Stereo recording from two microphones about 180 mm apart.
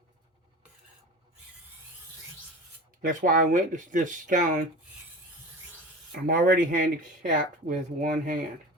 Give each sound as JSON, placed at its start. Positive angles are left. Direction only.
{"t": 3.0, "sound": "speech", "side_deg": -50}
{"t": 6.1, "sound": "speech", "side_deg": -55}